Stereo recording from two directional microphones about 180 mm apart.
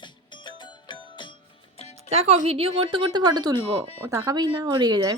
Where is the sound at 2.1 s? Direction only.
35° right (ahead or behind).